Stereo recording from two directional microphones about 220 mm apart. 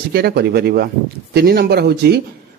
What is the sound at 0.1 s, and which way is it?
A man's voice, 45° right (ahead or behind).